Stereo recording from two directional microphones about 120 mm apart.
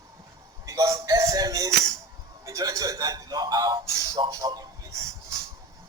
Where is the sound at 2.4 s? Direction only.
30° right (ahead or behind).